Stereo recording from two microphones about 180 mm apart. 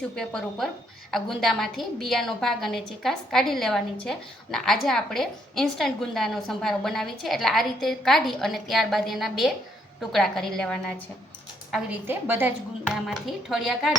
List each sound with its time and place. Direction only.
0.2 s a woman's voice: 5° left (ahead or behind)
11.7 s a woman's voice: 10° right (ahead or behind)